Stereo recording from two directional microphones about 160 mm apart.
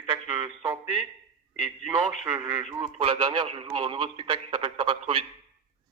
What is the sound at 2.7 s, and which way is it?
A man's voice, 35° right (ahead or behind).